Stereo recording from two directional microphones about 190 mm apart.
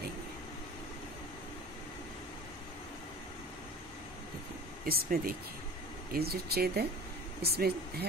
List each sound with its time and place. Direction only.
4.8 s speech: 50° right (ahead or behind)